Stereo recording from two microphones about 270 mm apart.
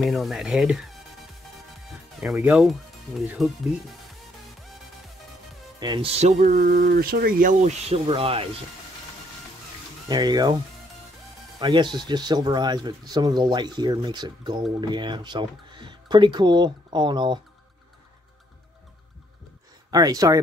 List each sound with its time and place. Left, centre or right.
0.0 s speech: centre
5.8 s speech: centre
10.0 s speech: centre
11.6 s speech: centre
19.9 s speech: centre